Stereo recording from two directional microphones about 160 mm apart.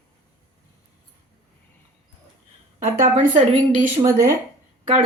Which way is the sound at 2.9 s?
50° right (ahead or behind).